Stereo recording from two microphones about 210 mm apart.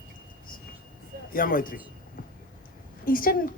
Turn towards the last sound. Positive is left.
turn(degrees=40)  # may be behind; listen again after turning